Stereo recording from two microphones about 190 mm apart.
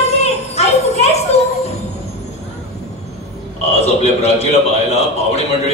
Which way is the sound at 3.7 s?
35° left (ahead or behind).